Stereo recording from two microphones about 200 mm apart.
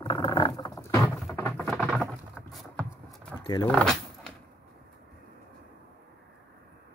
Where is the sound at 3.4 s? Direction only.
25° left (ahead or behind).